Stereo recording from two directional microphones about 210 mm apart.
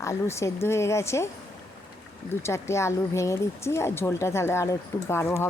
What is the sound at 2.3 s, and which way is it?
Speech, 10° left (ahead or behind).